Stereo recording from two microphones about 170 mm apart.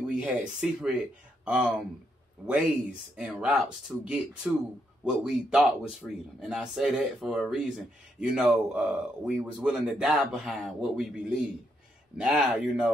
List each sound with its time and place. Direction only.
0.2 s speech: 5° right (ahead or behind)